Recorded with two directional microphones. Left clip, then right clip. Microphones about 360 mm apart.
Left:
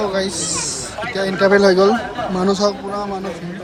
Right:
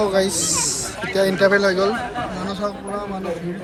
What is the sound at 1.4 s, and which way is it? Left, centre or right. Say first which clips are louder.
Speech: left 6 dB; centre.